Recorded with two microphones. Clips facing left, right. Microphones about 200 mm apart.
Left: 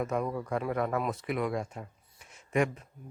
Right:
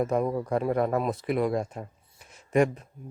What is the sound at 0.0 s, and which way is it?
Speech, 35° right (ahead or behind).